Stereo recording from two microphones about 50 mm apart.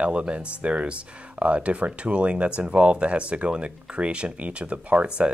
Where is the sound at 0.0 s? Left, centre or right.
Right.